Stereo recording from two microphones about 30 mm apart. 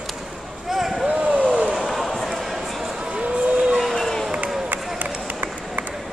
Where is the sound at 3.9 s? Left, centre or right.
Centre.